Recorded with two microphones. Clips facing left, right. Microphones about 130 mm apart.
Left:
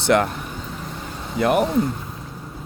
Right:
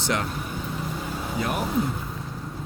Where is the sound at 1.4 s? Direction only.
60° left (ahead or behind).